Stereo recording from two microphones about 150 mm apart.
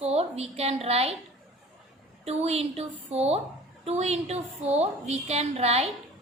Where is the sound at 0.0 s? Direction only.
45° right (ahead or behind).